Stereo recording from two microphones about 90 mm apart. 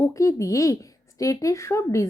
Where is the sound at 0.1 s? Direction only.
35° left (ahead or behind).